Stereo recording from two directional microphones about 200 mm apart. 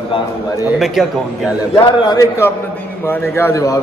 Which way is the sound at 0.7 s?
Centre (ahead or behind).